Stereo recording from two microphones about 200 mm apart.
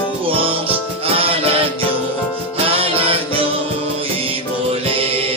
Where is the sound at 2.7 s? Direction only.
30° right (ahead or behind).